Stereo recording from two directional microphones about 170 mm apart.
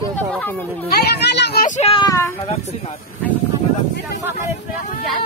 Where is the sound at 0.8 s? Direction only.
65° left (ahead or behind).